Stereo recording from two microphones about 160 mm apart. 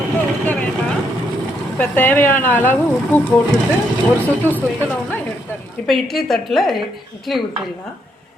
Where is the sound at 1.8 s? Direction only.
10° left (ahead or behind).